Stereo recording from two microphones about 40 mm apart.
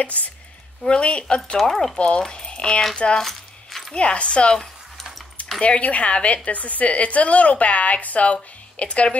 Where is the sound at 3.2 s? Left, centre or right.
Centre.